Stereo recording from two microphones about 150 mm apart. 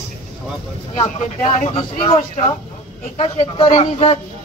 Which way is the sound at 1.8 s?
40° left (ahead or behind).